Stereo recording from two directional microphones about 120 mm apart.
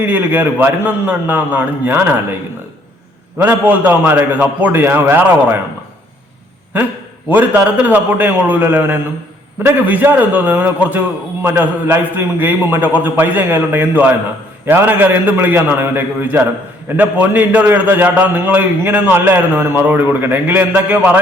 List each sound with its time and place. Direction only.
0.0 s a man's voice: 15° right (ahead or behind)
3.3 s a man's voice: 15° right (ahead or behind)
7.3 s a man's voice: 15° right (ahead or behind)